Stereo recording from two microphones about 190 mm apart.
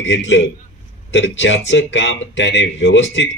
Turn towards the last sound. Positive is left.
turn(degrees=80)